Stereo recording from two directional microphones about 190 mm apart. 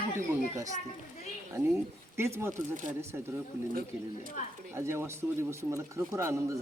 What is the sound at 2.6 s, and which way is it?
Speech, 40° right (ahead or behind).